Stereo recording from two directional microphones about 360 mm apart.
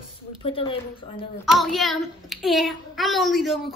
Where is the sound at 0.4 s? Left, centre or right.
Centre.